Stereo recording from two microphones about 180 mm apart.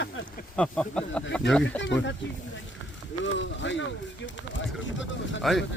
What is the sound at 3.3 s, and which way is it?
Speech, 90° left.